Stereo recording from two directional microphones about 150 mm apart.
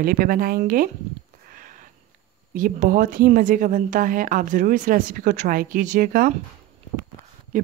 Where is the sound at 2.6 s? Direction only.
65° right (ahead or behind).